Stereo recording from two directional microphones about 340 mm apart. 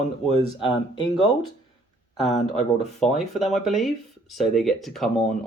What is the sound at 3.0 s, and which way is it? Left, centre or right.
Speech, centre.